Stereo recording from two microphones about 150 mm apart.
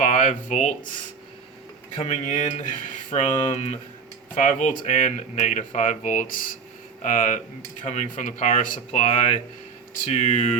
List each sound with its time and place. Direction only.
0.0 s speech: 55° left (ahead or behind)
2.0 s speech: 50° left (ahead or behind)
9.0 s speech: 40° left (ahead or behind)